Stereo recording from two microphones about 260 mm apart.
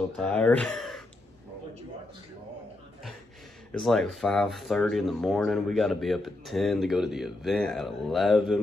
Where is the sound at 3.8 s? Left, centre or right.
Centre.